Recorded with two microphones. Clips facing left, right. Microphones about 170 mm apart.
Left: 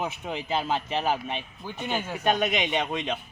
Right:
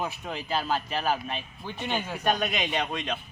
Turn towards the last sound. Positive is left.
turn(degrees=20)  # may be behind; listen again after turning